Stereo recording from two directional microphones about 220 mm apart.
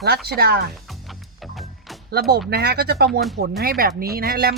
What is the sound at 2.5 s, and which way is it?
Speech, 45° right (ahead or behind).